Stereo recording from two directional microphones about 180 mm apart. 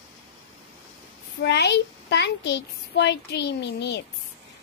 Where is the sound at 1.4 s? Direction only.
70° left (ahead or behind).